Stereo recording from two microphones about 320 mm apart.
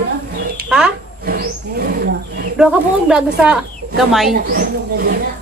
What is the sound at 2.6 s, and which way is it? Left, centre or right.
Speech, centre.